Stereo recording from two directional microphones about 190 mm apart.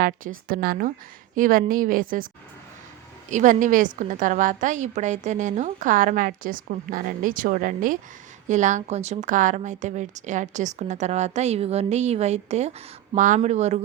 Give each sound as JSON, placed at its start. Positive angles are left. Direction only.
{"t": 0.0, "sound": "a woman's voice", "side_deg": -50}
{"t": 3.2, "sound": "a woman's voice", "side_deg": -40}